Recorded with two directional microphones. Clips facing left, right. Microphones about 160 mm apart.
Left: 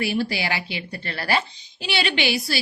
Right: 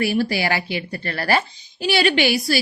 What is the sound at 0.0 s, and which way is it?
A woman's voice, 45° right (ahead or behind).